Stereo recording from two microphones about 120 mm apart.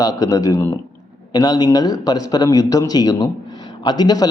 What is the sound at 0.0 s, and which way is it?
A man's voice, 30° left (ahead or behind).